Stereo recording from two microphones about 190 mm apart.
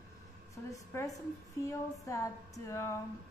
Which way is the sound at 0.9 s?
15° left (ahead or behind).